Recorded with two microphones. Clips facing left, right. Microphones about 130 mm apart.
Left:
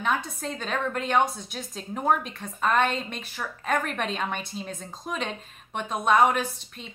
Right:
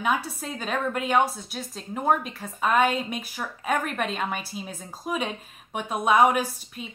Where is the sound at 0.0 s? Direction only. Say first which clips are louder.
Right 1 dB; 10° right (ahead or behind).